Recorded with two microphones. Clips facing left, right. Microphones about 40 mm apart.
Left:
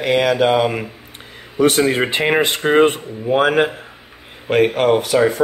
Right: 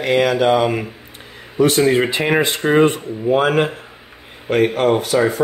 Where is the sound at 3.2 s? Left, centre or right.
Centre.